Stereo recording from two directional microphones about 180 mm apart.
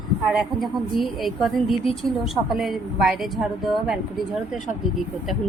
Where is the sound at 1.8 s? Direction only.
30° left (ahead or behind).